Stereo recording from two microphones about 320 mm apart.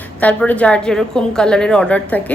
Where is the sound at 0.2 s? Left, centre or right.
Centre.